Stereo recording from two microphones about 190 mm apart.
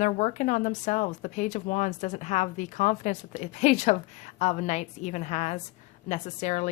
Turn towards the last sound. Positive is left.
turn(degrees=40)  # may be behind; listen again after turning